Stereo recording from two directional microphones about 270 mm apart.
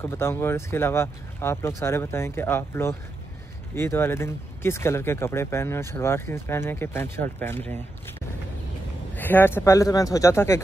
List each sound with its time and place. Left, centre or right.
0.0 s speech: centre
9.1 s speech: centre